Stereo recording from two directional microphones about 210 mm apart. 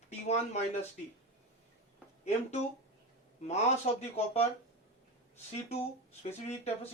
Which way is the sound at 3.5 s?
30° left (ahead or behind).